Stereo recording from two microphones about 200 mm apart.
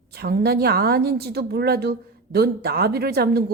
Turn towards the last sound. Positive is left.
turn(degrees=-50)  # may be behind; listen again after turning